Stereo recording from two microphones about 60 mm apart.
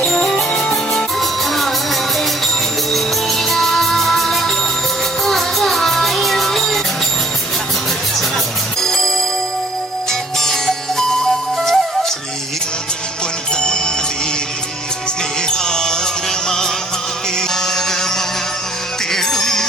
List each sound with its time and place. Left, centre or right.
0.1 s music: centre
1.2 s music: centre
8.8 s music: centre
11.5 s music: centre
13.6 s music: centre
15.4 s music: centre
19.1 s music: centre